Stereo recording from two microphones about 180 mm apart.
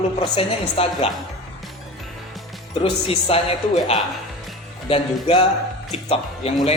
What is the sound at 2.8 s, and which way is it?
Speech, 30° left (ahead or behind).